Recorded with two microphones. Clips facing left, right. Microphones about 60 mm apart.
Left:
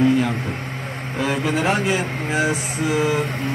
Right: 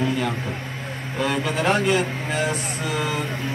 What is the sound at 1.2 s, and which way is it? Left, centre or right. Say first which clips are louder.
Speech: left 2 dB; centre.